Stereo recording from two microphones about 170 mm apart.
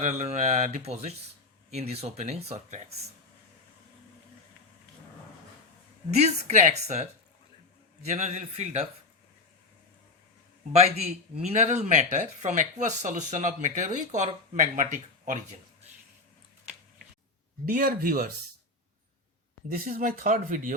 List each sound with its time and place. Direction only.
0.0 s speech: 45° right (ahead or behind)
6.1 s speech: 45° right (ahead or behind)
11.3 s speech: 40° right (ahead or behind)
17.7 s speech: 55° right (ahead or behind)
19.7 s speech: 60° right (ahead or behind)